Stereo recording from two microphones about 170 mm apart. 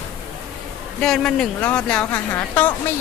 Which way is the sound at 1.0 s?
Centre (ahead or behind).